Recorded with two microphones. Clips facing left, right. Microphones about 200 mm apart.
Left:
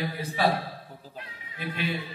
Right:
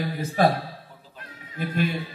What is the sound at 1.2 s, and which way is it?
Music, 45° right (ahead or behind).